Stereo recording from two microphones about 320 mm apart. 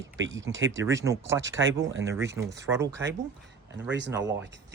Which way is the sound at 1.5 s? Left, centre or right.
Right.